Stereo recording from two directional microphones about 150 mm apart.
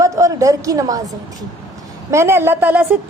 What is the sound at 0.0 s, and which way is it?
A woman's voice, 20° right (ahead or behind).